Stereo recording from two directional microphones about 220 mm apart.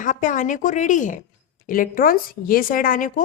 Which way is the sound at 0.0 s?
35° left (ahead or behind).